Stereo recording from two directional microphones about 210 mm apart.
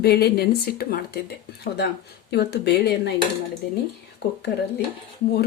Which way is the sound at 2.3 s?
50° left (ahead or behind).